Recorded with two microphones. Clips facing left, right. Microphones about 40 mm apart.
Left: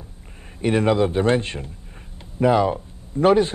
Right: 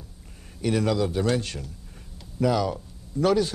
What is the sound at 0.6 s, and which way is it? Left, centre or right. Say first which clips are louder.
A man's voice: left 5 dB; left.